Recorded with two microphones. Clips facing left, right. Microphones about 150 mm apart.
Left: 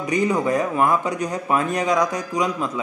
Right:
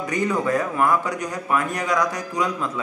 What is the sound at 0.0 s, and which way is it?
Speech, 20° left (ahead or behind).